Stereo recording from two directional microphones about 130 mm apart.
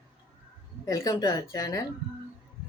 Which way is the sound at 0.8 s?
30° left (ahead or behind).